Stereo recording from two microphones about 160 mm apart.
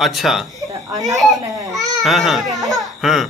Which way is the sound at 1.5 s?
20° right (ahead or behind).